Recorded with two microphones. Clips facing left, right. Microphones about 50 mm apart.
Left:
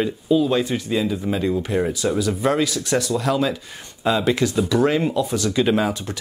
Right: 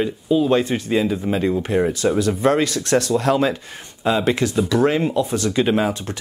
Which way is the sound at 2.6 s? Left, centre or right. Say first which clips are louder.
Right 2 dB; right.